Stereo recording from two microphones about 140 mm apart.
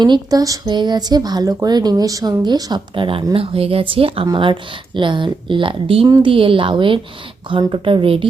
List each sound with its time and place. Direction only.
0.0 s speech: 30° right (ahead or behind)